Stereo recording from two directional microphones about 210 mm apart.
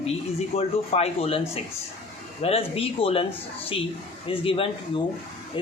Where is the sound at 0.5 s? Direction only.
30° left (ahead or behind).